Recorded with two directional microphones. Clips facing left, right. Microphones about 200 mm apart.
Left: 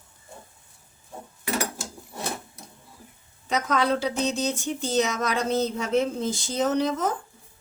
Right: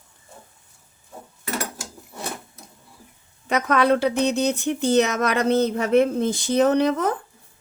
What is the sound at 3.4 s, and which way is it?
A woman's voice, 60° right (ahead or behind).